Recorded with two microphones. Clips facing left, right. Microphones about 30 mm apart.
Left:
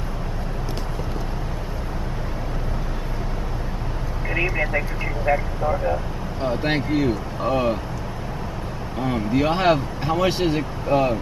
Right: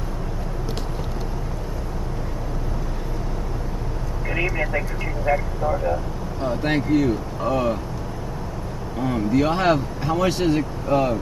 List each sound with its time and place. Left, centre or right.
4.6 s speech: centre
8.9 s speech: left